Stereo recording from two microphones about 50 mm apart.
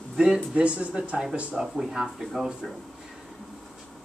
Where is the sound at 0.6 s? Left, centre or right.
Right.